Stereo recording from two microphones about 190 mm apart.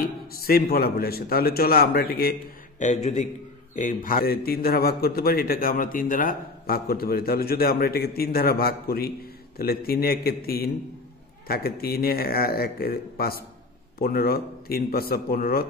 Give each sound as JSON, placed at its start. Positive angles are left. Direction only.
{"t": 0.3, "sound": "a man's voice", "side_deg": 55}
{"t": 2.8, "sound": "a man's voice", "side_deg": 35}